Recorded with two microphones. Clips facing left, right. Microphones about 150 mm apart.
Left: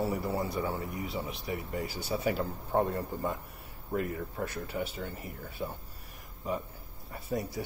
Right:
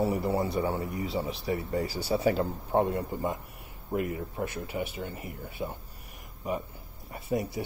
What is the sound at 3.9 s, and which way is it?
Speech, 10° right (ahead or behind).